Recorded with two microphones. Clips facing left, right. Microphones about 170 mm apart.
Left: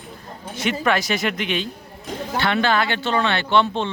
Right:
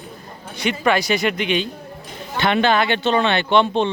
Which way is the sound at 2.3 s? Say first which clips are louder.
Right 3 dB; 20° right (ahead or behind).